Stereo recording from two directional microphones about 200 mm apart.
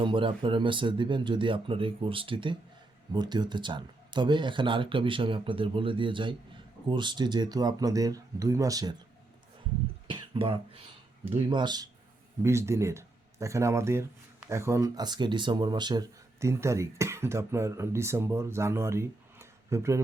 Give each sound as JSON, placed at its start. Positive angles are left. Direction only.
{"t": 0.0, "sound": "speech", "side_deg": -25}
{"t": 10.1, "sound": "a sound", "side_deg": -25}
{"t": 11.3, "sound": "speech", "side_deg": -20}